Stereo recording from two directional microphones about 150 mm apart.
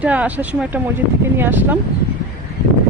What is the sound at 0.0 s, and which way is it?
Speech, 10° right (ahead or behind).